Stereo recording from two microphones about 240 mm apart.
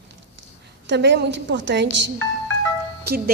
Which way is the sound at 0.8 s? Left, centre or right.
Right.